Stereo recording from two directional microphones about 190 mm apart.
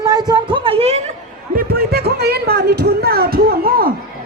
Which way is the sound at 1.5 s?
55° right (ahead or behind).